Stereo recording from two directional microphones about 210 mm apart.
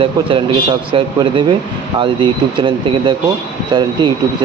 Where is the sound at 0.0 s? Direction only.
25° right (ahead or behind).